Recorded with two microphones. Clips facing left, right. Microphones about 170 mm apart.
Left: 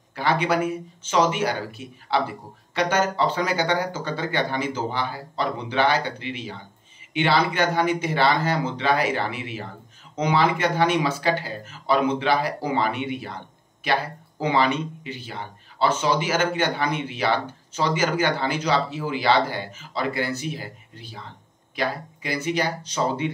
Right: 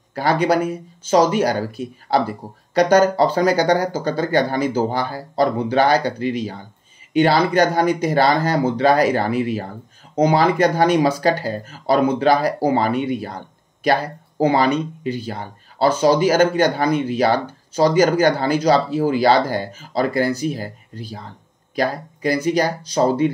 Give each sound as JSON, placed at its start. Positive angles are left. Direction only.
{"t": 0.1, "sound": "speech", "side_deg": -40}